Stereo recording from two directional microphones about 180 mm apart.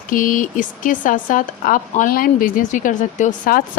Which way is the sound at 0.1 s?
50° left (ahead or behind).